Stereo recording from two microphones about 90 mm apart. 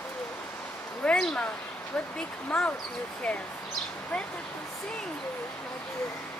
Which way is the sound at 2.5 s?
15° left (ahead or behind).